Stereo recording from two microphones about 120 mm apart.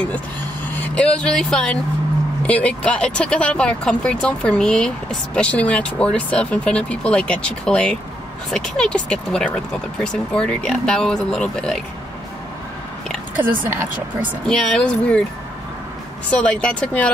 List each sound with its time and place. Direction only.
0.9 s speech: 10° left (ahead or behind)
13.4 s speech: 20° right (ahead or behind)
14.4 s speech: 5° left (ahead or behind)
16.3 s speech: 10° left (ahead or behind)